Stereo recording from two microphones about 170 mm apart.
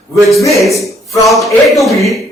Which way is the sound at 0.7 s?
20° left (ahead or behind).